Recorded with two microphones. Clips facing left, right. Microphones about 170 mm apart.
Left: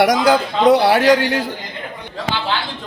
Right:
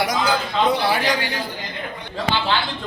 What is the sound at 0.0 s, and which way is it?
A man's voice, 80° left.